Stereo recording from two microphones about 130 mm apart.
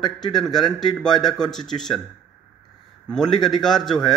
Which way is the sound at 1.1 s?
30° left (ahead or behind).